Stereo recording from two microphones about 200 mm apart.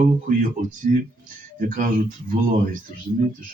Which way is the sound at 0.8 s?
40° right (ahead or behind).